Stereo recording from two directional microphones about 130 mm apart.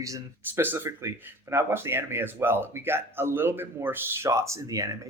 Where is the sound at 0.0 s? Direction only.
25° right (ahead or behind).